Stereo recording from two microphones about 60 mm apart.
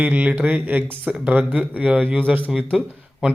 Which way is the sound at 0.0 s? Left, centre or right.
Right.